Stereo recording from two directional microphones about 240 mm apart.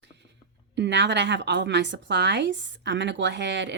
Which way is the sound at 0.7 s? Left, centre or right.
Right.